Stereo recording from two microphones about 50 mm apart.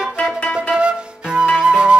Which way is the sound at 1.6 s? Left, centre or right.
Centre.